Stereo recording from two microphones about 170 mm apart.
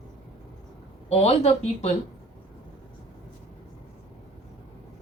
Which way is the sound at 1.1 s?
35° left (ahead or behind).